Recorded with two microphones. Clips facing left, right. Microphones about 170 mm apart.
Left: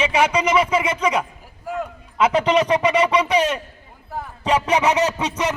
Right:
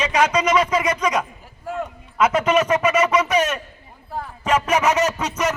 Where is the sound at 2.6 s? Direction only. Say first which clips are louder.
Even; 15° left (ahead or behind).